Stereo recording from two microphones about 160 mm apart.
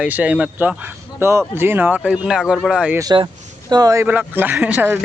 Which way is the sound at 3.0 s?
25° right (ahead or behind).